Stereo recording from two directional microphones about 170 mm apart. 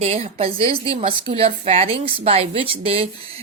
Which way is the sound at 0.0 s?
35° right (ahead or behind).